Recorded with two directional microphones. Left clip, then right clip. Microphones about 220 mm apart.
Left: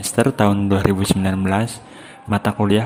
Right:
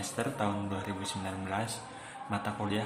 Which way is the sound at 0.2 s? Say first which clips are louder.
Left 17 dB; 45° left (ahead or behind).